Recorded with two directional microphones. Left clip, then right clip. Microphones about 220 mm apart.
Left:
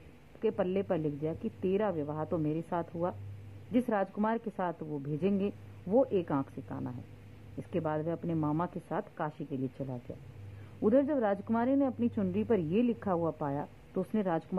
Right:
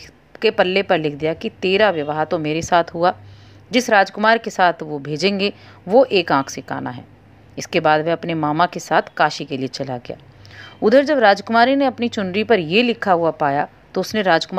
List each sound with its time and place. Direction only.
0.4 s a woman's voice: 20° right (ahead or behind)
9.4 s speech: 70° right (ahead or behind)
10.8 s speech: 25° right (ahead or behind)